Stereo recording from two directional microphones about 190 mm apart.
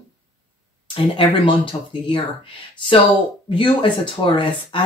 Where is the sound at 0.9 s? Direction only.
25° left (ahead or behind).